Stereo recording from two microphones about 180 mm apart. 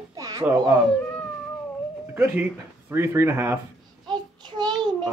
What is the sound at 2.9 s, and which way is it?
Speech, 15° right (ahead or behind).